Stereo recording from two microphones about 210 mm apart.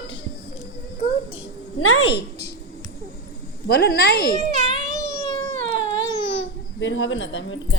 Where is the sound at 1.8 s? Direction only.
90° left.